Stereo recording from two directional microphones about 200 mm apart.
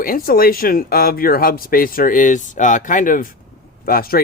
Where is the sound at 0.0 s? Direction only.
45° left (ahead or behind).